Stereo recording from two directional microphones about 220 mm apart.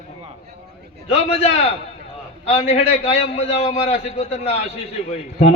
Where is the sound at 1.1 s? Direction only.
25° left (ahead or behind).